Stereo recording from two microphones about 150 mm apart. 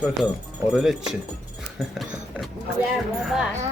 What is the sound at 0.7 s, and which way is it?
Speech, 5° right (ahead or behind).